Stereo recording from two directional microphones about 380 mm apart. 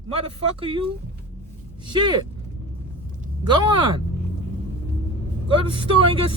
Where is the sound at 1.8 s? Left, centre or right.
Centre.